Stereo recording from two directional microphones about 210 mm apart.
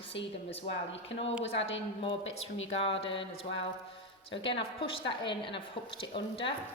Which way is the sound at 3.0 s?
25° left (ahead or behind).